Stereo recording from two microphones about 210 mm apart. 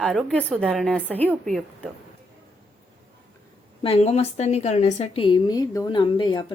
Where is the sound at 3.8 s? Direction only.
30° left (ahead or behind).